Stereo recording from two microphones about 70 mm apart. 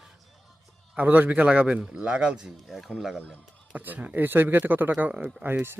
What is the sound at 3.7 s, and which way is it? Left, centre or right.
Speech, right.